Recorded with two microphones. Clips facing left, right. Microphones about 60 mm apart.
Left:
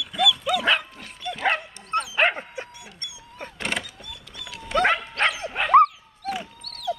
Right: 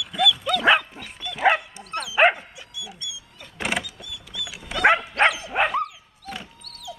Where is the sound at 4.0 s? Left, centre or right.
Left.